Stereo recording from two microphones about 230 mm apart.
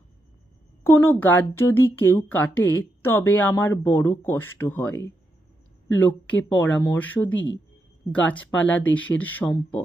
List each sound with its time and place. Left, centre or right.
0.9 s speech: centre
7.3 s speech: left
8.1 s speech: centre